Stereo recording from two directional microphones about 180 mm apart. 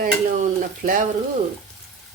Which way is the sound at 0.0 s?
45° right (ahead or behind).